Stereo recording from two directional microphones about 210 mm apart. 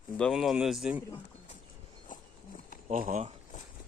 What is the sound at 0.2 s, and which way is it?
Speech, centre (ahead or behind).